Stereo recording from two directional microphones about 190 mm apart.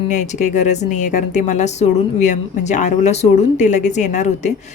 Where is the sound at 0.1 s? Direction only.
40° left (ahead or behind).